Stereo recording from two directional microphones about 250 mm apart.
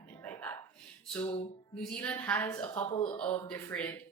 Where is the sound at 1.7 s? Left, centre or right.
Centre.